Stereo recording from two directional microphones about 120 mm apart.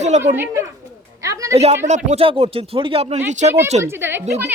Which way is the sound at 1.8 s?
75° right (ahead or behind).